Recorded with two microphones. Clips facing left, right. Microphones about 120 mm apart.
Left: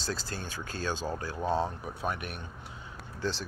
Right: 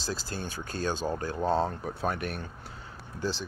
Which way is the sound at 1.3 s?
30° right (ahead or behind).